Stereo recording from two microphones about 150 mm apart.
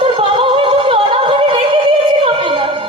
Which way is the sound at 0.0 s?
35° right (ahead or behind).